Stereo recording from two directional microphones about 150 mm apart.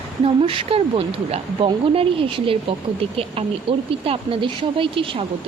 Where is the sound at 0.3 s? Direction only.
35° right (ahead or behind).